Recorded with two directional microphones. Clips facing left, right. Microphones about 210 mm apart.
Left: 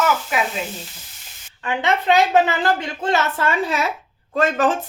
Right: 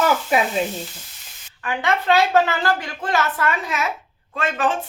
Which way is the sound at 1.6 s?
20° left (ahead or behind).